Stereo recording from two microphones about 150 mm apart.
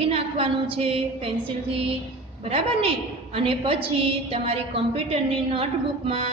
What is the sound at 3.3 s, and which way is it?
A woman's voice, 40° right (ahead or behind).